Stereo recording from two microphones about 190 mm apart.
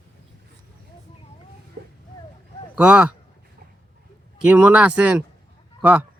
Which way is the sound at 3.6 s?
50° right (ahead or behind).